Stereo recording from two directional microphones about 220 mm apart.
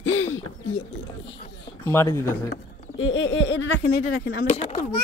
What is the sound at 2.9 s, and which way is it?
Speech, 65° left (ahead or behind).